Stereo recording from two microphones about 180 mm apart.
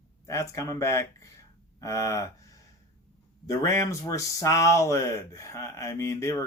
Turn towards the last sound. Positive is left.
turn(degrees=15)  # may be behind; listen again after turning